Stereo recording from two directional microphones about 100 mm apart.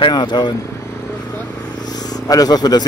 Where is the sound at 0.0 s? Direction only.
50° left (ahead or behind).